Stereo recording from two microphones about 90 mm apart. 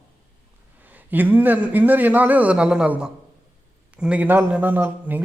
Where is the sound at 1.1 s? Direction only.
20° right (ahead or behind).